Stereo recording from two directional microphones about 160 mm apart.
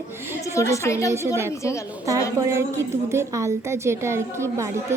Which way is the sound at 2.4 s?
15° right (ahead or behind).